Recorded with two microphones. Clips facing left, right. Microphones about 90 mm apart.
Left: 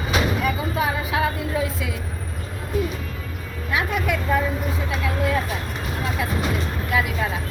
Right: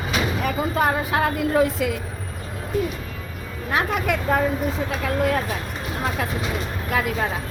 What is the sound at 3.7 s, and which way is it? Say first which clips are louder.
Speech: right 1 dB; 45° right (ahead or behind).